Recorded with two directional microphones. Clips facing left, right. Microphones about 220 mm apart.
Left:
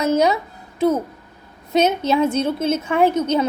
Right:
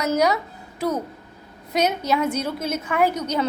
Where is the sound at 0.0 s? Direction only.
25° left (ahead or behind).